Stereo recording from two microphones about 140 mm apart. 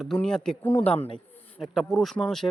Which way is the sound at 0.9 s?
45° left (ahead or behind).